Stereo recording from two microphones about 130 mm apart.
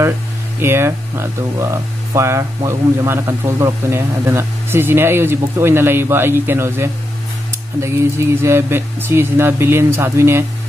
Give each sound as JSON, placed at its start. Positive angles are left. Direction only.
{"t": 0.6, "sound": "speech", "side_deg": -20}
{"t": 8.4, "sound": "speech", "side_deg": -20}